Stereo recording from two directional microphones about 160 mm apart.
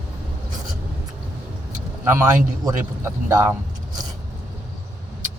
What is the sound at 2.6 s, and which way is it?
Speech, 20° right (ahead or behind).